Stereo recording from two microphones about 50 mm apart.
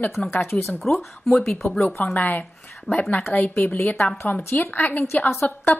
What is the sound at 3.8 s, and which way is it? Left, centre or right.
A woman's voice, left.